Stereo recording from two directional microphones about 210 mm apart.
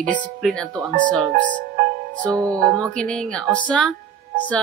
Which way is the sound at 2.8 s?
5° left (ahead or behind).